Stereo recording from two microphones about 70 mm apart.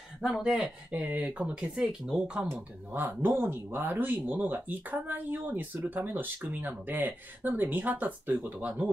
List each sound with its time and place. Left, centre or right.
0.2 s speech: centre
1.0 s speech: right
1.4 s speech: centre
2.5 s speech: right